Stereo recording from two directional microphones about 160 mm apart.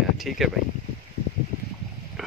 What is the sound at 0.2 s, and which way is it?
Speech, centre (ahead or behind).